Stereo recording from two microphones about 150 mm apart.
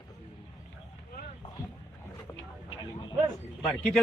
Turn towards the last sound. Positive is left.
turn(degrees=0)  # may be behind; listen again after turning